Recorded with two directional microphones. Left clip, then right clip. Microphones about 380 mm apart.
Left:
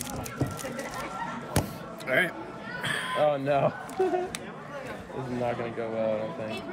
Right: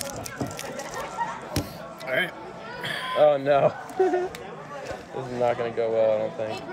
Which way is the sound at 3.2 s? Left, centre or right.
Right.